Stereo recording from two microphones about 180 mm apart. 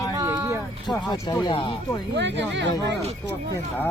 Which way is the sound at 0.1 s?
15° right (ahead or behind).